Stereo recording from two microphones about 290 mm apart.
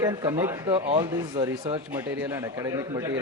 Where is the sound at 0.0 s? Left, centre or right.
Centre.